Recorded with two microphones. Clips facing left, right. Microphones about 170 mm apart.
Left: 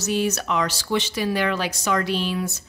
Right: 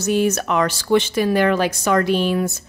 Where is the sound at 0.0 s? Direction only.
50° right (ahead or behind).